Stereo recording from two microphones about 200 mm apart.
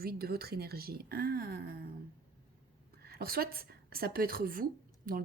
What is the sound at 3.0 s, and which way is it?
A woman's voice, 50° right (ahead or behind).